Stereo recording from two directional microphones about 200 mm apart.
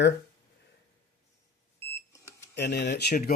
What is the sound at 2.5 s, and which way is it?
Speech, 55° left (ahead or behind).